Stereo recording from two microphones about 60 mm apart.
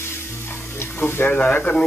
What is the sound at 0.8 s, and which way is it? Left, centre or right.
Frying, left.